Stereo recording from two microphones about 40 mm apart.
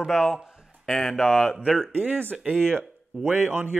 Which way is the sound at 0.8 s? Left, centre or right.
Centre.